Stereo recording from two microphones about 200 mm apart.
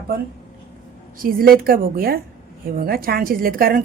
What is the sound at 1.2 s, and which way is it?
A woman's voice, 45° right (ahead or behind).